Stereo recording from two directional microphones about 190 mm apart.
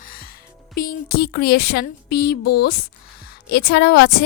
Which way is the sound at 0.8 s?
50° left (ahead or behind).